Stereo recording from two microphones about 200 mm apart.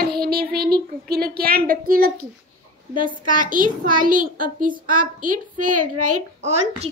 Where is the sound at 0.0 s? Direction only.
50° right (ahead or behind).